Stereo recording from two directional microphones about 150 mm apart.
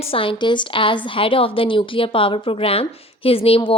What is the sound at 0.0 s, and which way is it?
A woman's voice, 35° left (ahead or behind).